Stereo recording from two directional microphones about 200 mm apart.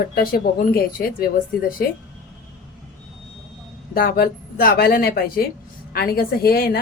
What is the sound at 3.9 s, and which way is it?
A woman's voice, 50° left (ahead or behind).